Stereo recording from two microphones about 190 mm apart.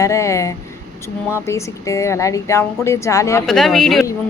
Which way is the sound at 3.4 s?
Centre (ahead or behind).